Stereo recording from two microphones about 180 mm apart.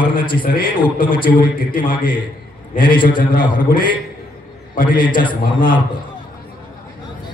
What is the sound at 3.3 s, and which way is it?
A man's voice, 50° left (ahead or behind).